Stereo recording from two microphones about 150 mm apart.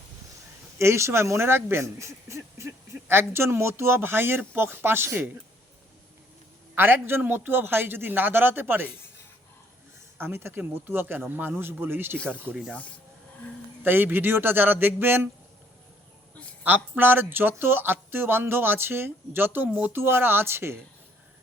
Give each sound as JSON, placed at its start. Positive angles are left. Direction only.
{"t": 0.8, "sound": "speech", "side_deg": -20}
{"t": 6.7, "sound": "speech", "side_deg": -15}
{"t": 10.2, "sound": "speech", "side_deg": -15}
{"t": 13.8, "sound": "speech", "side_deg": -15}
{"t": 16.6, "sound": "speech", "side_deg": -10}